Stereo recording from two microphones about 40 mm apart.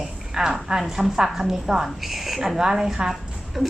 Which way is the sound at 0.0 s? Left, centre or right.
Centre.